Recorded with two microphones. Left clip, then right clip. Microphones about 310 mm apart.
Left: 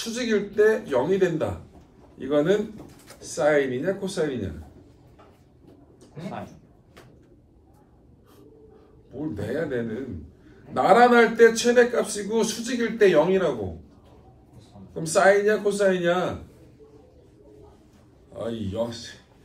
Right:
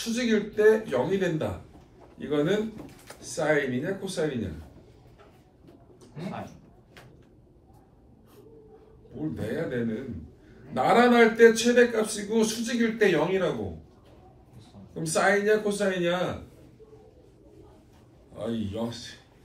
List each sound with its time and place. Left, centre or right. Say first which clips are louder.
0.1 s a man's voice: left 2 dB; centre
9.3 s a man's voice: left 4 dB; centre
15.0 s a man's voice: left 5 dB; centre
18.4 s a man's voice: left 4 dB; centre